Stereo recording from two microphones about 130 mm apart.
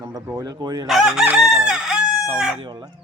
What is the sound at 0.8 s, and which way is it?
Chicken, centre (ahead or behind).